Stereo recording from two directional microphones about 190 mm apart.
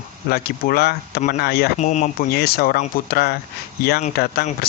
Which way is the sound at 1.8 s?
40° left (ahead or behind).